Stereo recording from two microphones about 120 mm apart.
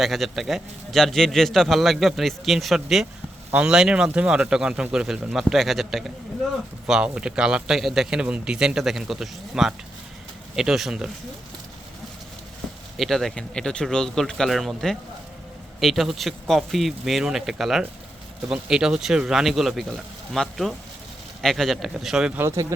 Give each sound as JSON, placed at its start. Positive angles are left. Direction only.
{"t": 0.0, "sound": "a man's voice", "side_deg": 0}
{"t": 13.0, "sound": "a man's voice", "side_deg": 0}
{"t": 22.4, "sound": "speech", "side_deg": -20}